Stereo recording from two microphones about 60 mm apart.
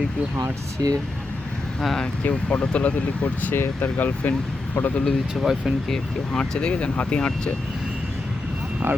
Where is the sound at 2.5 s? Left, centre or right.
Left.